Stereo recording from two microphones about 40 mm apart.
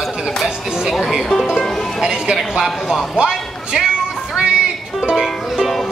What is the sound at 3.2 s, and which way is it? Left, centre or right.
Music, centre.